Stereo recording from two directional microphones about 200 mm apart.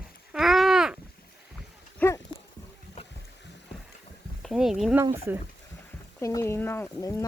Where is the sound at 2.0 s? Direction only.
15° left (ahead or behind).